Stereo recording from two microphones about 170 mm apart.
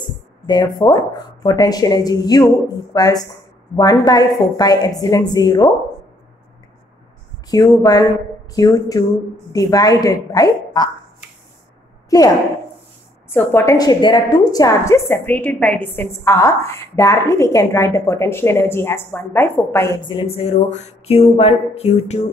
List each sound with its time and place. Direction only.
0.0 s speech: 25° left (ahead or behind)
7.4 s speech: 20° left (ahead or behind)
13.3 s a woman's voice: 15° left (ahead or behind)
20.0 s a sound: 30° left (ahead or behind)